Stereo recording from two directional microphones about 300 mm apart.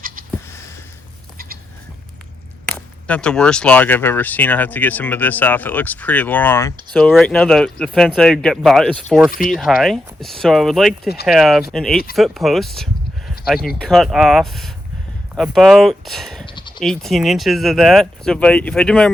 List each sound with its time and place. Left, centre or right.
0.2 s a sound: right
2.7 s speech: centre
16.5 s bleat: centre
16.8 s speech: centre